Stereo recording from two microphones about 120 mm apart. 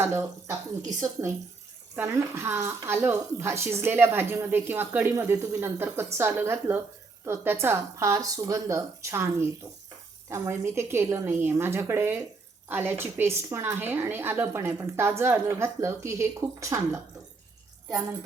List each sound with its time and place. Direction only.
0.0 s speech: 20° right (ahead or behind)
2.0 s speech: 20° right (ahead or behind)